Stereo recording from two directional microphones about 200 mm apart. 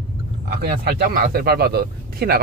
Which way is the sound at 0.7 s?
50° right (ahead or behind).